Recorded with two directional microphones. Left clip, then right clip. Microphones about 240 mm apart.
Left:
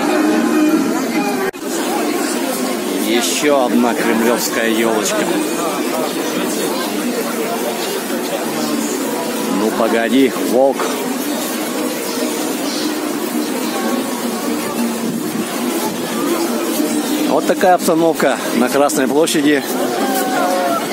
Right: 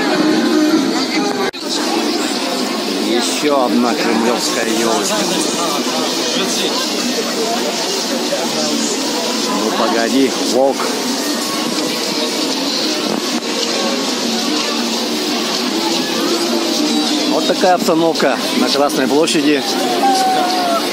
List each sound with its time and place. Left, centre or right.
3.4 s speech: centre
17.6 s speech: centre